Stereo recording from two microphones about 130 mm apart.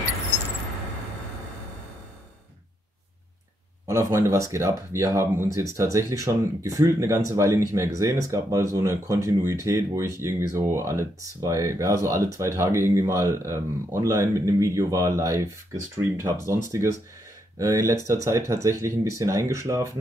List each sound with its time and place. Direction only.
3.8 s speech: 20° right (ahead or behind)
17.6 s speech: 25° right (ahead or behind)